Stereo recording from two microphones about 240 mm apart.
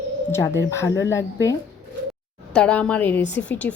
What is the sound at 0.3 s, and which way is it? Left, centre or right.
A woman's voice, centre.